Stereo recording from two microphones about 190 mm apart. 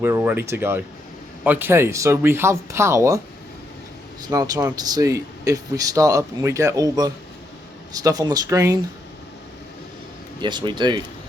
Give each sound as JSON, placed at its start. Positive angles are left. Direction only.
{"t": 0.0, "sound": "speech", "side_deg": -10}
{"t": 4.3, "sound": "speech", "side_deg": -20}
{"t": 10.4, "sound": "speech", "side_deg": -25}